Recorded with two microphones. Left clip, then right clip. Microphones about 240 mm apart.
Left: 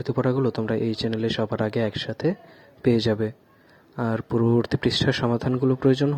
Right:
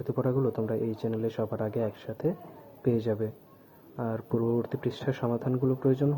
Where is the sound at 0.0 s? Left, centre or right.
Left.